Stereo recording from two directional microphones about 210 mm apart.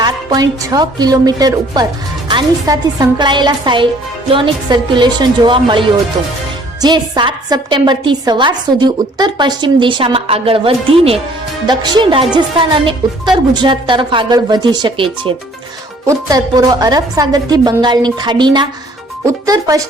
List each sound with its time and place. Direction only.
0.0 s a woman's voice: 15° right (ahead or behind)
6.8 s a woman's voice: 20° right (ahead or behind)